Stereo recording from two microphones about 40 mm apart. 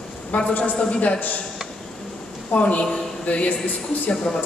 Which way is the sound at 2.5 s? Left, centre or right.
Left.